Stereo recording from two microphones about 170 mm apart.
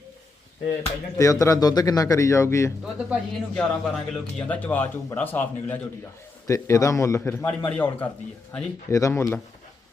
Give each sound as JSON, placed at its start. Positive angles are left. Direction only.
{"t": 0.8, "sound": "speech", "side_deg": 20}
{"t": 2.8, "sound": "a man's voice", "side_deg": 0}